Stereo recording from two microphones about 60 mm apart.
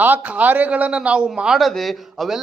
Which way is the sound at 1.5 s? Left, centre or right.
Centre.